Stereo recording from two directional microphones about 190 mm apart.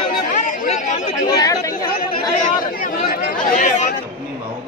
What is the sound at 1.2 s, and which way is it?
Speech, 20° left (ahead or behind).